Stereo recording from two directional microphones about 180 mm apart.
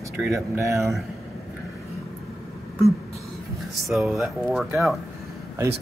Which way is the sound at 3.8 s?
Centre (ahead or behind).